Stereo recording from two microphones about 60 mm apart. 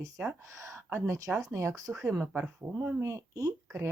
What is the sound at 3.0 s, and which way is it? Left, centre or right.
Speech, right.